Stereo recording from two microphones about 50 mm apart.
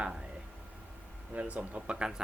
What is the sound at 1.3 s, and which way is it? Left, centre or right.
Speech, right.